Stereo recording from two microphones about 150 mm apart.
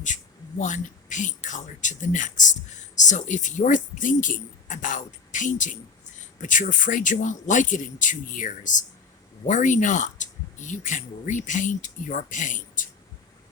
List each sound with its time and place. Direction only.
0.6 s speech: 55° left (ahead or behind)